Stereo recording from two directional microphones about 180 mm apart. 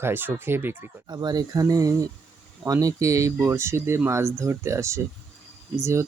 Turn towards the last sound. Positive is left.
turn(degrees=-15)  # may be behind; listen again after turning